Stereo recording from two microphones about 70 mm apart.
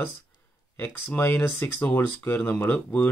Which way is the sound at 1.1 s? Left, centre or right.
Left.